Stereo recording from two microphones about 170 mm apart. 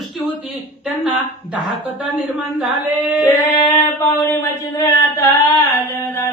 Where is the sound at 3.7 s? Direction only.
15° left (ahead or behind).